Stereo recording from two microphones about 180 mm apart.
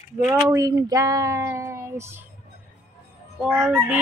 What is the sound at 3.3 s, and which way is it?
Speech, 5° right (ahead or behind).